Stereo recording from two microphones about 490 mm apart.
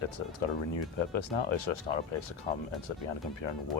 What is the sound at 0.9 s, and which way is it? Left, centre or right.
Speech, left.